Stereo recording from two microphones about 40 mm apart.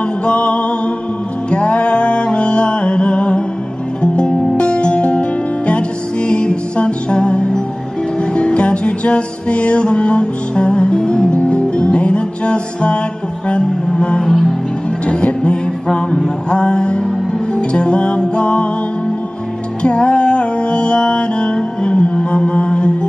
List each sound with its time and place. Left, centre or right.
0.2 s music: left
14.2 s music: centre
15.0 s music: left
19.8 s music: left